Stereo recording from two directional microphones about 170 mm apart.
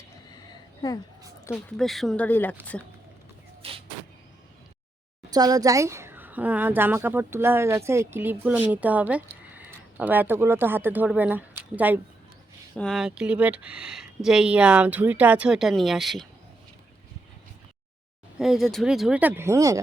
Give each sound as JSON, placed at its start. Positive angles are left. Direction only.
{"t": 0.5, "sound": "a sound", "side_deg": 20}
{"t": 1.5, "sound": "speech", "side_deg": 5}
{"t": 3.6, "sound": "vehicle", "side_deg": -35}
{"t": 5.3, "sound": "a woman's voice", "side_deg": -20}
{"t": 12.7, "sound": "speech", "side_deg": 0}
{"t": 18.3, "sound": "speech", "side_deg": 0}